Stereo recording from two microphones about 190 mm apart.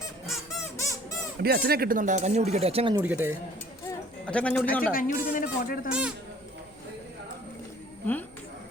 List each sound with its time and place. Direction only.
1.4 s speech: 55° right (ahead or behind); by 3.0 s 30° right (ahead or behind)
3.0 s speech: 10° right (ahead or behind)
3.8 s a sound: 5° left (ahead or behind)
4.9 s speech: 45° left (ahead or behind)
5.9 s a man's voice: 5° right (ahead or behind)